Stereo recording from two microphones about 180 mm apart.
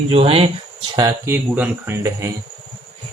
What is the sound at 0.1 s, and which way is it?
Speech, 30° right (ahead or behind).